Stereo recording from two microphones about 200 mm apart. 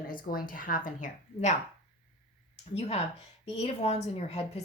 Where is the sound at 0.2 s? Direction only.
45° left (ahead or behind).